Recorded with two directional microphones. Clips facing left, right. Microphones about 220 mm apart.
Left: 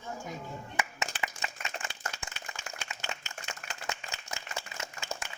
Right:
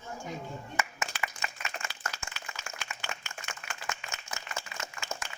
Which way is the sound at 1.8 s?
20° left (ahead or behind).